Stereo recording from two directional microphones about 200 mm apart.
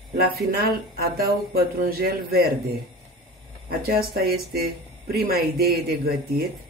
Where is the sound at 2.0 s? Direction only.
50° right (ahead or behind).